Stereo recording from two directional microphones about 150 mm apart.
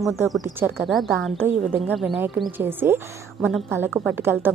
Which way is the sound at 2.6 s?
15° right (ahead or behind).